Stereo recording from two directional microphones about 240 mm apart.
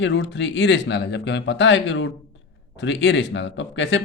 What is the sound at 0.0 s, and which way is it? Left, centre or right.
Speech, left.